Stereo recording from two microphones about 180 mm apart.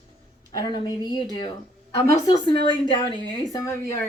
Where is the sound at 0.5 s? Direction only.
20° left (ahead or behind).